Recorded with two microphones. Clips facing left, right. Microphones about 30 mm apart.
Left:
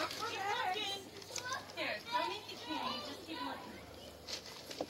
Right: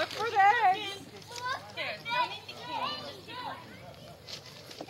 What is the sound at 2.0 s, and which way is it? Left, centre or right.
Speech, right.